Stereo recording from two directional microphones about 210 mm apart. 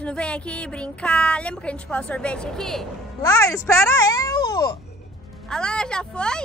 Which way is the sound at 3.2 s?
15° left (ahead or behind).